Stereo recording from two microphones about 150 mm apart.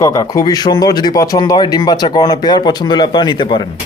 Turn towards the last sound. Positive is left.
turn(degrees=30)  # may be behind; listen again after turning